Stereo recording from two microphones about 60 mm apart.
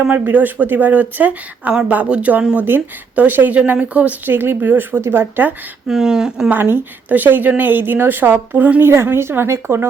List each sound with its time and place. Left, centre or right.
0.0 s speech: right
2.6 s a woman's voice: right
4.3 s a woman's voice: right
5.9 s speech: centre
6.5 s a woman's voice: right